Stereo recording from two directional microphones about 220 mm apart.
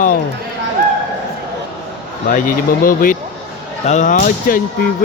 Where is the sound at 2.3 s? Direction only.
40° left (ahead or behind).